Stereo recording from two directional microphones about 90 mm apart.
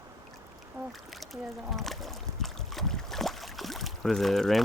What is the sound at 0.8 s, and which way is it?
Boat, 35° right (ahead or behind).